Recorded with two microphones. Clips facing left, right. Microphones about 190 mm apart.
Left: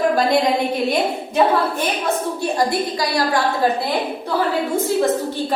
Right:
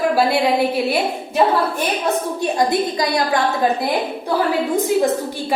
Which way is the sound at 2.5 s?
20° right (ahead or behind).